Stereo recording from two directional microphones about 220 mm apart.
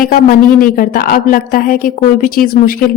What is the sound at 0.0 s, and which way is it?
Speech, 40° left (ahead or behind).